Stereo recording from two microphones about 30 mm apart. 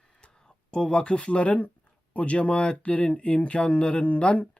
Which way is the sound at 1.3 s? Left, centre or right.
Left.